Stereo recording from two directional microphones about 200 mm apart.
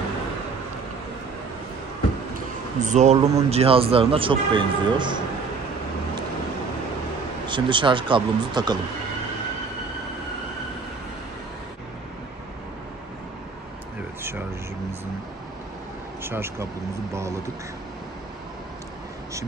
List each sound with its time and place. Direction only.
2.3 s speech: 35° right (ahead or behind)
7.4 s speech: 25° right (ahead or behind)
16.3 s speech: 10° right (ahead or behind)